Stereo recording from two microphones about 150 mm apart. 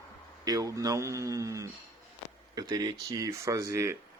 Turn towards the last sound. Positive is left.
turn(degrees=-20)  # may be behind; listen again after turning